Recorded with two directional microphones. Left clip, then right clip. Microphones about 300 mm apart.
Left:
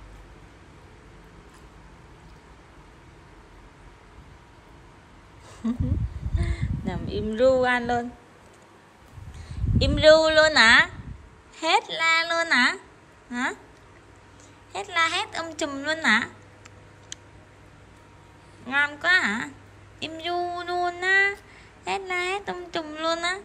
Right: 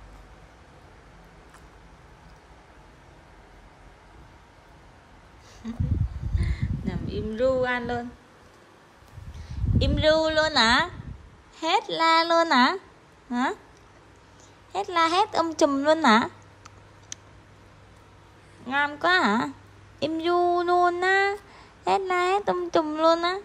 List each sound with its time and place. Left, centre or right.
5.6 s speech: centre
9.5 s a woman's voice: centre
14.7 s a woman's voice: centre
18.7 s a woman's voice: centre
20.5 s music: right
21.8 s a woman's voice: right